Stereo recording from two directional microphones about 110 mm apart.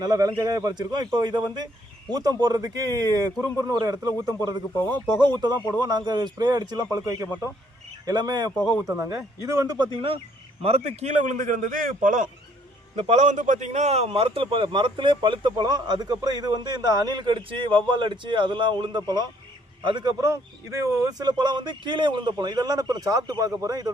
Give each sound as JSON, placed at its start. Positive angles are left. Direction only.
{"t": 0.0, "sound": "a man's voice", "side_deg": -35}
{"t": 9.0, "sound": "a man's voice", "side_deg": -30}
{"t": 10.6, "sound": "a man's voice", "side_deg": -65}
{"t": 13.0, "sound": "a man's voice", "side_deg": -85}